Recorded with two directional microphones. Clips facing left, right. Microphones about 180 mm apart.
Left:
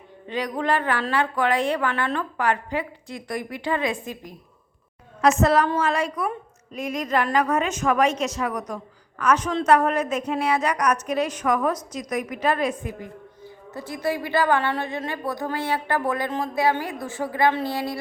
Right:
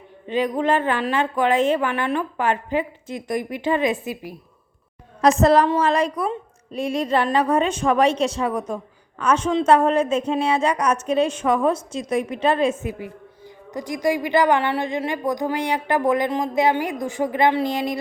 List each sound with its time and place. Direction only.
0.3 s a woman's voice: 20° right (ahead or behind)
5.2 s a woman's voice: 35° right (ahead or behind)
13.7 s a woman's voice: 15° right (ahead or behind)